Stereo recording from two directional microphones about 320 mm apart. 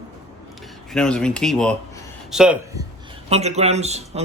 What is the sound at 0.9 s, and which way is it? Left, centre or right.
A man's voice, centre.